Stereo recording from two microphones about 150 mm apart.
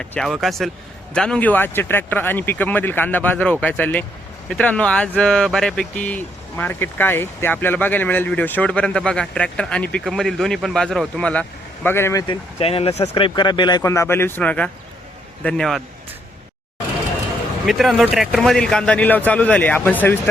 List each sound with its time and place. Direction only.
0.0 s speech: 5° left (ahead or behind)
12.3 s speech: 40° left (ahead or behind); by 15.8 s 5° left (ahead or behind)
17.7 s speech: centre (ahead or behind)